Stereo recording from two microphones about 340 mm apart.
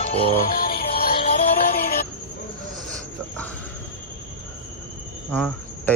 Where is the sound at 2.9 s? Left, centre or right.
Centre.